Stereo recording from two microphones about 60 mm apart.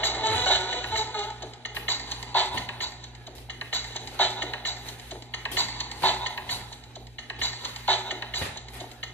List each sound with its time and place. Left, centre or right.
0.0 s music: left